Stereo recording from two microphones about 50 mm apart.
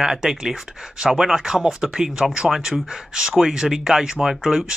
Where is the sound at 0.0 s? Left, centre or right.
Centre.